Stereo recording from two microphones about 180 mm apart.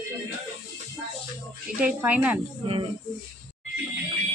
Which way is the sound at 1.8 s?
10° right (ahead or behind).